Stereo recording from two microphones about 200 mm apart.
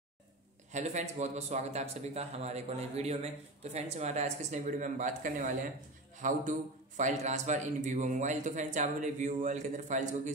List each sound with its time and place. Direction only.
0.7 s a man's voice: 35° right (ahead or behind)